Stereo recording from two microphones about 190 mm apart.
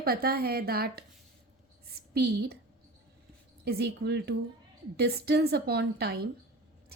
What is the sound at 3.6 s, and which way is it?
A woman's voice, 55° right (ahead or behind).